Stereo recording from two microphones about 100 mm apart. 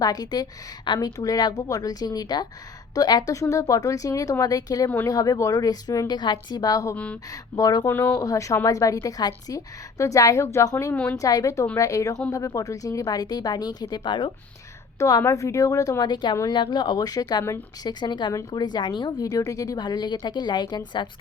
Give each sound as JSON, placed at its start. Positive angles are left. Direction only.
{"t": 0.0, "sound": "speech", "side_deg": 40}
{"t": 6.9, "sound": "speech", "side_deg": 15}
{"t": 7.3, "sound": "speech", "side_deg": 35}
{"t": 7.9, "sound": "speech", "side_deg": 20}
{"t": 8.1, "sound": "speech", "side_deg": 35}
{"t": 10.9, "sound": "speech", "side_deg": 15}
{"t": 11.2, "sound": "speech", "side_deg": 35}
{"t": 14.9, "sound": "speech", "side_deg": 30}
{"t": 16.0, "sound": "speech", "side_deg": 50}